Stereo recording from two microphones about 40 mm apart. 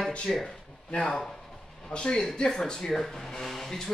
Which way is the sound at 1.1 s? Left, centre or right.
Centre.